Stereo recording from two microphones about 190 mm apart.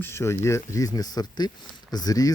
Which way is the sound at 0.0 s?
15° left (ahead or behind).